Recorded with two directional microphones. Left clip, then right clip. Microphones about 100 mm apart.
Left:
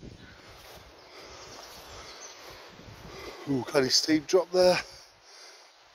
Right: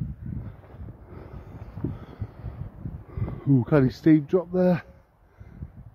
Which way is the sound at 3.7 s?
30° right (ahead or behind).